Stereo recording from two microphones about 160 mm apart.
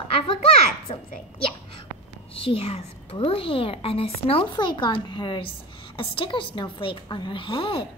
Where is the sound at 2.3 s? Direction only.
35° left (ahead or behind).